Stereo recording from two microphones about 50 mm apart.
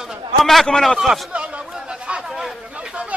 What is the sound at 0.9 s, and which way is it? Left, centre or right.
Speech, centre.